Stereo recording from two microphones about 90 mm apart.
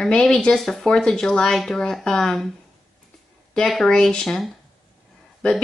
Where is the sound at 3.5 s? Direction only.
5° left (ahead or behind).